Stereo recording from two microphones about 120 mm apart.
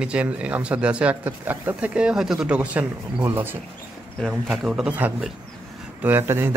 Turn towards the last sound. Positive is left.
turn(degrees=-20)  # may be behind; listen again after turning